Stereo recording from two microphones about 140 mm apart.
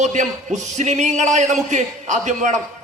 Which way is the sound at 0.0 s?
60° right (ahead or behind).